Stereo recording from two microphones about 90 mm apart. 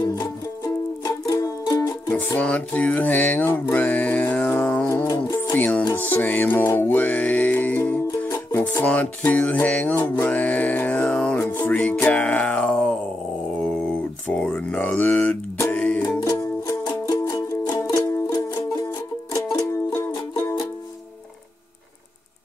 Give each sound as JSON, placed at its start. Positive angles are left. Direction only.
{"t": 1.0, "sound": "music", "side_deg": 40}
{"t": 2.0, "sound": "music", "side_deg": 15}
{"t": 8.3, "sound": "music", "side_deg": 35}
{"t": 8.8, "sound": "music", "side_deg": 15}
{"t": 11.3, "sound": "music", "side_deg": 20}
{"t": 13.6, "sound": "a sound", "side_deg": 10}
{"t": 15.7, "sound": "music", "side_deg": 10}
{"t": 16.6, "sound": "music", "side_deg": 45}
{"t": 17.2, "sound": "music", "side_deg": 35}